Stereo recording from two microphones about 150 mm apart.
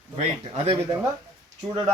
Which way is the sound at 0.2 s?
40° right (ahead or behind).